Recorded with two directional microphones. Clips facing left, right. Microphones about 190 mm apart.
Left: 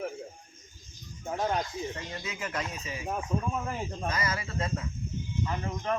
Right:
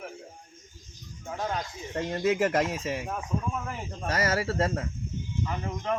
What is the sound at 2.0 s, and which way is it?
Speech, 55° right (ahead or behind).